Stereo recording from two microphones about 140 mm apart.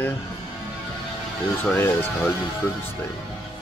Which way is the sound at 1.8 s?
15° left (ahead or behind).